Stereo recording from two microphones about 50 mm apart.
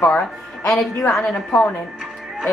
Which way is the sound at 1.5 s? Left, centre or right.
Left.